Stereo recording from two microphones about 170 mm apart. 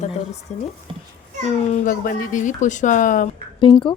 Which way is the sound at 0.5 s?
45° left (ahead or behind).